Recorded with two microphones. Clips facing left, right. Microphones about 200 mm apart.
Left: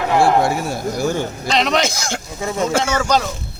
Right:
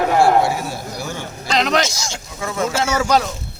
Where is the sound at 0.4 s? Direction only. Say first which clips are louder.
Left 3 dB; 45° left (ahead or behind).